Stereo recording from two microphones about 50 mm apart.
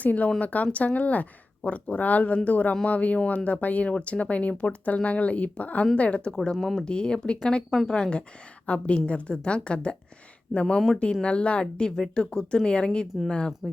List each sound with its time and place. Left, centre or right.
0.0 s speech: left
6.3 s a woman's voice: centre
6.8 s a woman's voice: centre